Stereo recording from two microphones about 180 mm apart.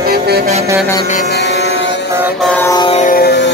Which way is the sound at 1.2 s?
65° left (ahead or behind).